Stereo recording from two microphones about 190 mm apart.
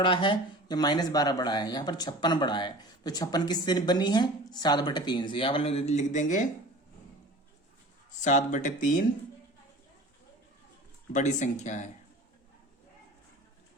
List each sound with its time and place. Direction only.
0.0 s speech: 25° left (ahead or behind); by 6.4 s 40° left (ahead or behind)
8.2 s speech: 40° left (ahead or behind)
11.1 s speech: 40° left (ahead or behind)